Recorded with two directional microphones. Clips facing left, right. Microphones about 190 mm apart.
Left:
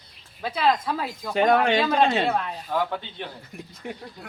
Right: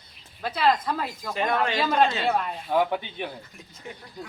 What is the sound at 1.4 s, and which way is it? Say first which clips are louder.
Speech: left 6 dB; 65° left (ahead or behind).